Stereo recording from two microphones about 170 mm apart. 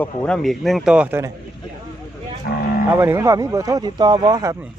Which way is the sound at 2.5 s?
65° left (ahead or behind).